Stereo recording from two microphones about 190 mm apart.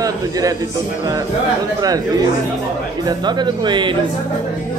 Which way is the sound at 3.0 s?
20° right (ahead or behind).